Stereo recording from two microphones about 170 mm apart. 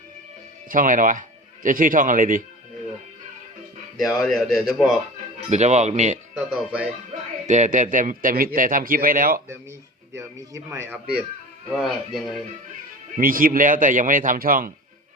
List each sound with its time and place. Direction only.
0.7 s a man's voice: 50° right (ahead or behind)
4.3 s speech: centre (ahead or behind)
5.5 s a man's voice: 45° right (ahead or behind)
6.3 s speech: 5° right (ahead or behind)
7.4 s a man's voice: 45° right (ahead or behind)
10.1 s a man's voice: 15° right (ahead or behind); by 12.2 s centre (ahead or behind)
13.1 s a man's voice: 55° right (ahead or behind)